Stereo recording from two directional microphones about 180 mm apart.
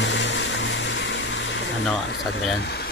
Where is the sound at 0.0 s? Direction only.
80° left.